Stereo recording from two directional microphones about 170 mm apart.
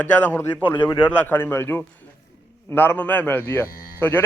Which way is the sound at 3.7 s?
60° left (ahead or behind).